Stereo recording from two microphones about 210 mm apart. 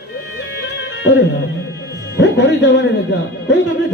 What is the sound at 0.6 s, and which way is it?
Music, 55° left (ahead or behind).